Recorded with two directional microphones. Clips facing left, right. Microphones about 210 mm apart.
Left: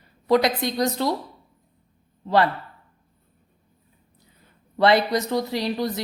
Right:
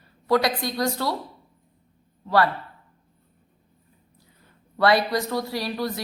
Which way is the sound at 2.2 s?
20° left (ahead or behind).